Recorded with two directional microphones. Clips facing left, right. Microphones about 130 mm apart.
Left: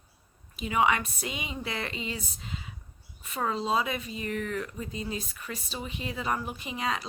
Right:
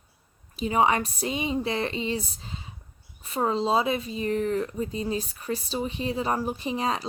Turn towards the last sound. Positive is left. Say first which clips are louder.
# right 5 dB
turn(degrees=-35)  # may be behind; listen again after turning